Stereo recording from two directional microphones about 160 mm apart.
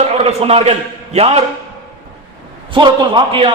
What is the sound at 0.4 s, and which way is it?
Speech, 40° right (ahead or behind).